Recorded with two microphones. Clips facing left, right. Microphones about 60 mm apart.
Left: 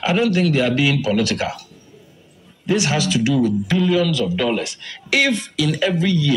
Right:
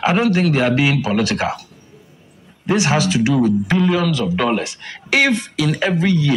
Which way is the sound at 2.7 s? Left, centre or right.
Right.